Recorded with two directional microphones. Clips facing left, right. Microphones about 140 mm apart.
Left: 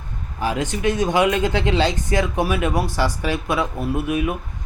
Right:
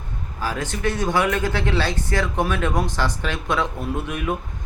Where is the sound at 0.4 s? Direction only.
15° left (ahead or behind).